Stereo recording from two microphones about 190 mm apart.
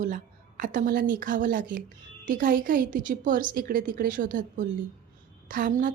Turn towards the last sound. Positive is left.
turn(degrees=-45)  # may be behind; listen again after turning